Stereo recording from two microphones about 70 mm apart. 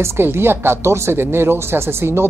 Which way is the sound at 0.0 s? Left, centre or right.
Right.